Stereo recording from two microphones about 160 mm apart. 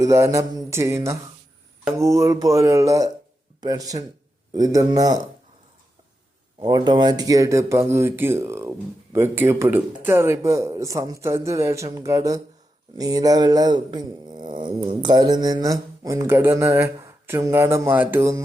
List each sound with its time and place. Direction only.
0.0 s speech: 20° right (ahead or behind)
6.6 s speech: 30° right (ahead or behind)